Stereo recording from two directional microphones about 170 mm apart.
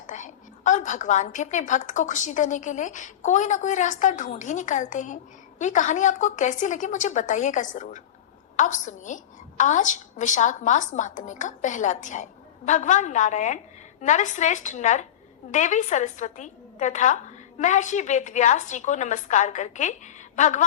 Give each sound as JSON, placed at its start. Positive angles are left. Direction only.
{"t": 0.1, "sound": "a woman's voice", "side_deg": 45}